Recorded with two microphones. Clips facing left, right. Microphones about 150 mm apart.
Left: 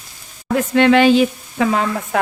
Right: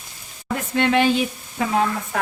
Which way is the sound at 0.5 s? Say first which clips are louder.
Left 7 dB; 90° left.